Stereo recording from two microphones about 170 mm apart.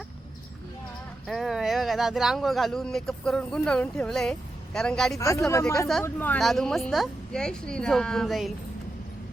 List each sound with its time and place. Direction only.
1.3 s speech: centre (ahead or behind)
5.1 s speech: 20° left (ahead or behind); by 8.5 s centre (ahead or behind)